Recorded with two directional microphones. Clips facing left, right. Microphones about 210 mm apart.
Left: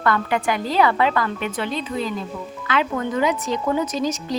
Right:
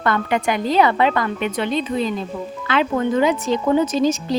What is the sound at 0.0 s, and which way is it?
Speech, 20° right (ahead or behind).